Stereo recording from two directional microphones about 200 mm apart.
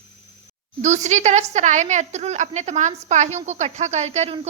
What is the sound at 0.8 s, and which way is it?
A woman's voice, 35° right (ahead or behind).